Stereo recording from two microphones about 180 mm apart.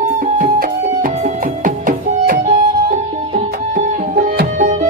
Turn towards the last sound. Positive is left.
turn(degrees=-50)  # may be behind; listen again after turning